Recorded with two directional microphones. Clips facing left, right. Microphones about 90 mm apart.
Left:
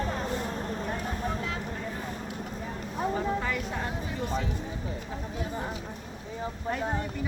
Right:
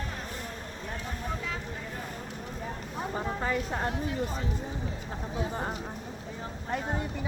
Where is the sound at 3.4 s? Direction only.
35° right (ahead or behind).